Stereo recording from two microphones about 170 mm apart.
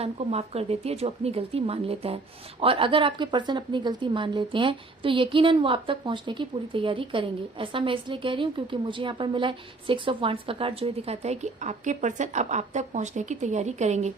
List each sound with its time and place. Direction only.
0.0 s a woman's voice: 35° right (ahead or behind)